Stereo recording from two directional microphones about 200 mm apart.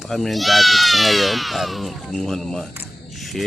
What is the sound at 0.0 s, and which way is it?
Speech, centre (ahead or behind).